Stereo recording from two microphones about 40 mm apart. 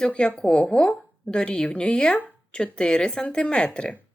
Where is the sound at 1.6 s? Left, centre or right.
Centre.